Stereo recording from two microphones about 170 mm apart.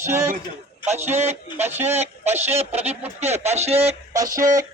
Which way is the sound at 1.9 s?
40° right (ahead or behind).